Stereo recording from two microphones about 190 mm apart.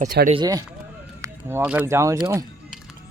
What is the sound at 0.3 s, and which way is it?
Speech, 20° right (ahead or behind).